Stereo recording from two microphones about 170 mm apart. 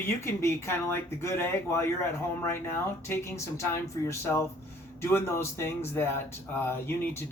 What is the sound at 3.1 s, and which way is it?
Speech, 15° left (ahead or behind).